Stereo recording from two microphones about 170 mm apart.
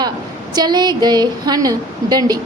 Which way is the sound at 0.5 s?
25° right (ahead or behind).